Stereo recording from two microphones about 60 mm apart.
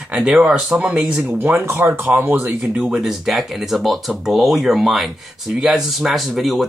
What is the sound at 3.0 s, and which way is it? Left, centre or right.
Speech, centre.